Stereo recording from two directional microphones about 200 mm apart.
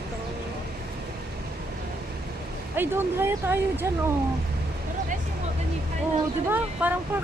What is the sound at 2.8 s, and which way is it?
Speech, 10° right (ahead or behind).